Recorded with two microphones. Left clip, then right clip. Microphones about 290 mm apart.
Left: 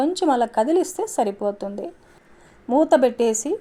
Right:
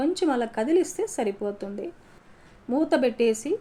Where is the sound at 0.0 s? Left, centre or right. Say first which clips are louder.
Left 5 dB; left.